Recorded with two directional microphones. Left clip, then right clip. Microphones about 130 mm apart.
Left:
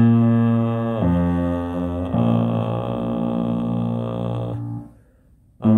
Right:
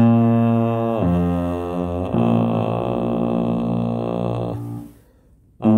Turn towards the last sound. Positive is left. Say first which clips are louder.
# right 2 dB
turn(degrees=-20)  # may be behind; listen again after turning